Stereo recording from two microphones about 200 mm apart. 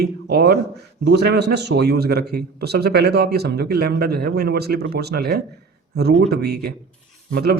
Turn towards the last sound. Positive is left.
turn(degrees=-50)  # may be behind; listen again after turning